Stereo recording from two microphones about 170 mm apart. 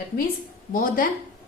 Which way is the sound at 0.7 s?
55° left (ahead or behind).